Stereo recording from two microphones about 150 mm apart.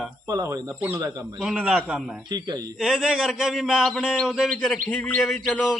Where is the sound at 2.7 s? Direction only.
Centre (ahead or behind).